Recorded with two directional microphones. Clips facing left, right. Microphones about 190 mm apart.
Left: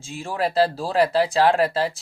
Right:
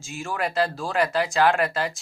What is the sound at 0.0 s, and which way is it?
Speech, 30° left (ahead or behind).